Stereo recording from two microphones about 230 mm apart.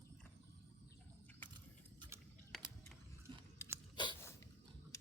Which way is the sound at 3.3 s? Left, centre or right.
Right.